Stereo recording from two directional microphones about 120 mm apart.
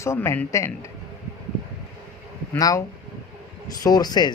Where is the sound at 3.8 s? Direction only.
35° left (ahead or behind).